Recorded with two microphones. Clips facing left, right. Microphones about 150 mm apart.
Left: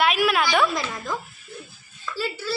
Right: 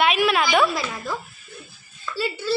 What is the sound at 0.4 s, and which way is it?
Speech, 10° right (ahead or behind).